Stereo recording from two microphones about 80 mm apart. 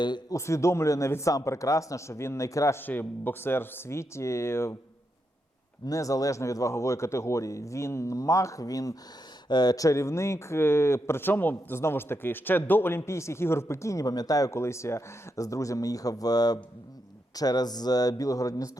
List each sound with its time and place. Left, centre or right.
0.3 s speech: left
2.7 s speech: left
5.8 s speech: left
9.5 s speech: left
14.5 s speech: left